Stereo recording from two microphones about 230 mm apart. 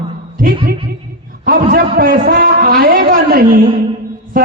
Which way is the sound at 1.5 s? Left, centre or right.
Right.